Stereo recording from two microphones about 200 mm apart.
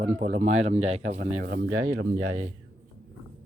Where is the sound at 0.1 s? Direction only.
35° right (ahead or behind).